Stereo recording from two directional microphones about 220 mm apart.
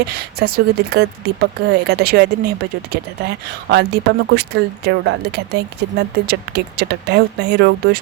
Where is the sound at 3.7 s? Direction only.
50° right (ahead or behind).